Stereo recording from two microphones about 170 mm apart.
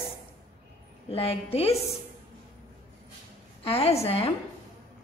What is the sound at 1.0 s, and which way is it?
Speech, 35° left (ahead or behind).